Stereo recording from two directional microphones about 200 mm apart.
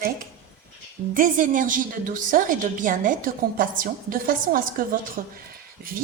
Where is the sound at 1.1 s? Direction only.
40° right (ahead or behind).